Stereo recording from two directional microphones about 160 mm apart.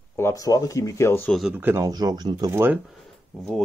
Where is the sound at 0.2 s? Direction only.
20° left (ahead or behind).